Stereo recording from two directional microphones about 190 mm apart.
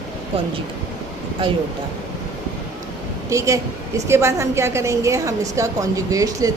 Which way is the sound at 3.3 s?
15° right (ahead or behind).